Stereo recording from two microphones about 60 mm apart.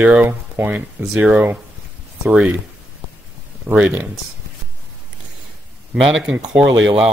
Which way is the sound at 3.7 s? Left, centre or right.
Centre.